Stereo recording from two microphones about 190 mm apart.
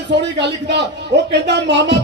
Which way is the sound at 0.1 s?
65° right (ahead or behind).